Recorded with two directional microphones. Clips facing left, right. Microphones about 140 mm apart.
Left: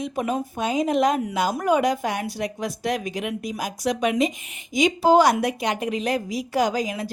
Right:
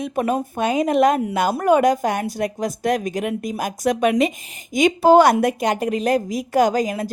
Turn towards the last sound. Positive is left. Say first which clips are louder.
# right 5 dB
turn(degrees=-45)  # may be behind; listen again after turning